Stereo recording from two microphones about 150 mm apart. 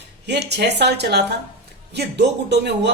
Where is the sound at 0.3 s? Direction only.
90° right.